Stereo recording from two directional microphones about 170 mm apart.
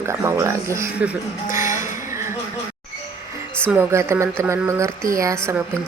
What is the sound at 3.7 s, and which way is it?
Speech, 10° right (ahead or behind).